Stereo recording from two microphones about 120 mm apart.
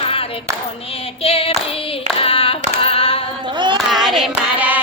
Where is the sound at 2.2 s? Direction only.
50° left (ahead or behind).